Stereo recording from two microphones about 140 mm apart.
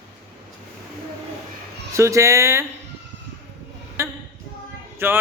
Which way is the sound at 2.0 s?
20° right (ahead or behind).